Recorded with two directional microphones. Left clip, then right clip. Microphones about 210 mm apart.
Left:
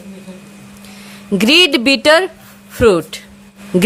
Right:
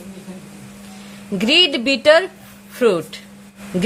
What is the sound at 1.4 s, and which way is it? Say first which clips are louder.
A woman's voice: left 4 dB; 25° left (ahead or behind).